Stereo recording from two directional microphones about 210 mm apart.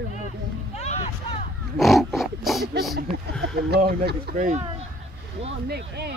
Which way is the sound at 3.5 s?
50° right (ahead or behind).